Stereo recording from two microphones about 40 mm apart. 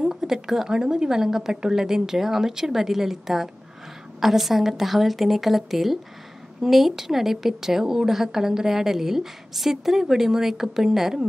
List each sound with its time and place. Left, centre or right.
0.0 s a woman's voice: centre